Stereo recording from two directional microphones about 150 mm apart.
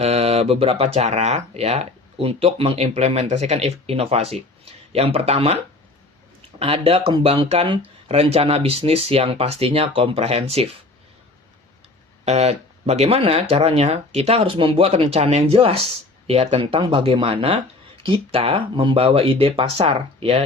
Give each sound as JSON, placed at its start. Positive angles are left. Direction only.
{"t": 0.0, "sound": "speech", "side_deg": -45}
{"t": 6.6, "sound": "speech", "side_deg": -40}
{"t": 12.2, "sound": "speech", "side_deg": -45}